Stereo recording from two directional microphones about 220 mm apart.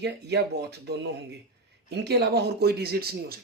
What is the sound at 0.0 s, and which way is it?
Speech, 50° right (ahead or behind).